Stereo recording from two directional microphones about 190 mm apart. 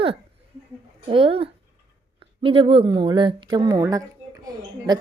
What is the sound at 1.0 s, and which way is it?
Speech, 25° right (ahead or behind).